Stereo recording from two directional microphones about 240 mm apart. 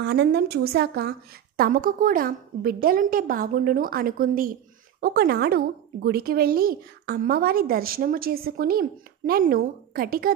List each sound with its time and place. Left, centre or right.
0.0 s a woman's voice: right